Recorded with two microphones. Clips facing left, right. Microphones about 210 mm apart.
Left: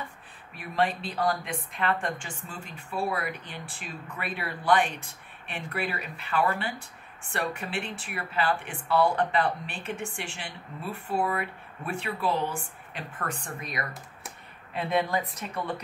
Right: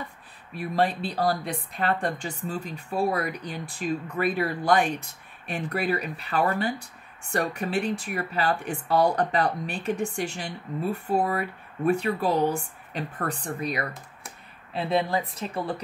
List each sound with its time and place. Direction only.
0.6 s a woman's voice: 35° right (ahead or behind)